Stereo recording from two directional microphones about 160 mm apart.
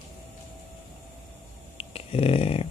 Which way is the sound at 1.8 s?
35° left (ahead or behind).